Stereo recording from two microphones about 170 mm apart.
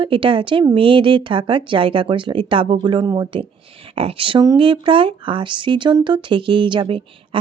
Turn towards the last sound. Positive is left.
turn(degrees=-30)  # may be behind; listen again after turning